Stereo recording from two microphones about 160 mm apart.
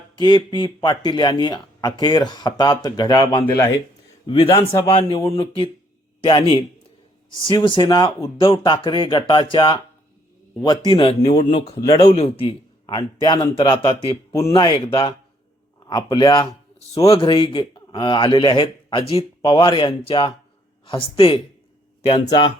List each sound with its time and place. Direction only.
0.2 s a man's voice: 30° left (ahead or behind)
12.1 s a man's voice: 35° left (ahead or behind)